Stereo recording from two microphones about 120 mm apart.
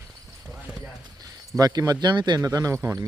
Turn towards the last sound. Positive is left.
turn(degrees=-25)  # may be behind; listen again after turning